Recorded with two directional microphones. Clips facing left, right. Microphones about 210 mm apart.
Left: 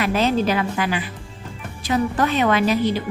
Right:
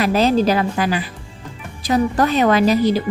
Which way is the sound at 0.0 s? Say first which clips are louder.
Right 4 dB; 35° right (ahead or behind).